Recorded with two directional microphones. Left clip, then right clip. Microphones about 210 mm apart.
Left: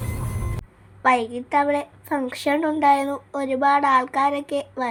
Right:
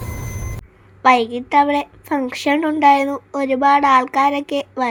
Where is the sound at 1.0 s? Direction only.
20° right (ahead or behind).